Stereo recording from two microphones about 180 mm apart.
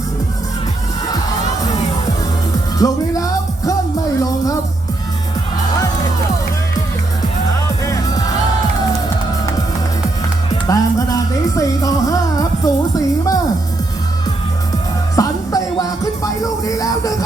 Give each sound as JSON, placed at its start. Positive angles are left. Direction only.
{"t": 2.7, "sound": "music", "side_deg": 20}
{"t": 7.9, "sound": "music", "side_deg": 20}
{"t": 10.7, "sound": "music", "side_deg": 20}
{"t": 15.1, "sound": "music", "side_deg": 20}